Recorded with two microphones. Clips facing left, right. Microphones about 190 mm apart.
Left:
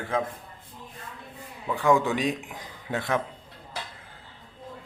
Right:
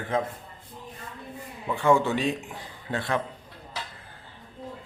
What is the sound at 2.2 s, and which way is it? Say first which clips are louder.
Speech: even; 15° left (ahead or behind).